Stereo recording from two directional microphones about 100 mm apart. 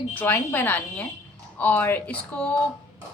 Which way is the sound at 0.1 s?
20° left (ahead or behind).